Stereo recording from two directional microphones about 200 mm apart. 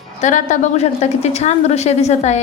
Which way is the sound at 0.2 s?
35° left (ahead or behind).